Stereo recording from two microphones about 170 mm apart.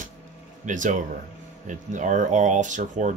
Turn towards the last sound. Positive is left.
turn(degrees=-45)  # may be behind; listen again after turning